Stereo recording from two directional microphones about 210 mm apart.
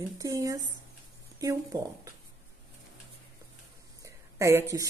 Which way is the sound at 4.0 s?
15° right (ahead or behind).